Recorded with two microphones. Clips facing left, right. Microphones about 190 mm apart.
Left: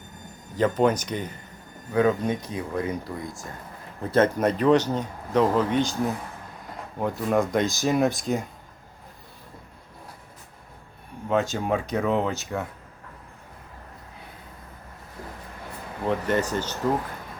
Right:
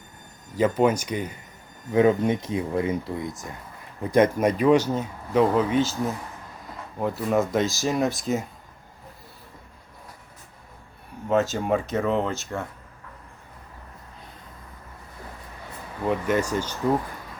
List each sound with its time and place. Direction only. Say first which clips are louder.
0.5 s speech: right 1 dB; 10° right (ahead or behind)
1.9 s speech: right 3 dB; 25° right (ahead or behind); by 8.4 s centre (ahead or behind)
11.3 s speech: right 2 dB; 5° right (ahead or behind)
16.0 s speech: right 1 dB; 10° right (ahead or behind)